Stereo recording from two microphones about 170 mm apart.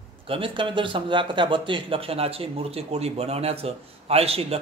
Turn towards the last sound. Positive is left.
turn(degrees=-35)  # may be behind; listen again after turning